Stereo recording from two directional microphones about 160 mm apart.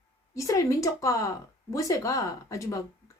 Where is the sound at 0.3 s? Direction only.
20° left (ahead or behind).